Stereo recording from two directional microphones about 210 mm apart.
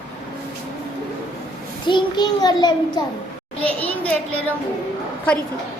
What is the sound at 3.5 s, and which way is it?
Speech, 5° left (ahead or behind).